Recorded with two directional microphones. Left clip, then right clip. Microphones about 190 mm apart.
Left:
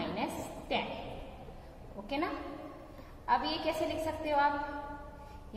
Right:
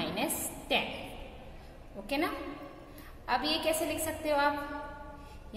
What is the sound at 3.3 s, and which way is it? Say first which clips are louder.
A woman's voice: right 1 dB; 25° right (ahead or behind).